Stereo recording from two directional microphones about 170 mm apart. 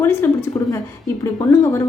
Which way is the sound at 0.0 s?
15° left (ahead or behind).